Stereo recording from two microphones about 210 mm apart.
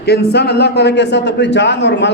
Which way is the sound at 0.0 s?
50° left (ahead or behind).